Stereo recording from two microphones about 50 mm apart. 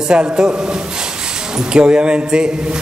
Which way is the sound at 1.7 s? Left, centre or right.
Centre.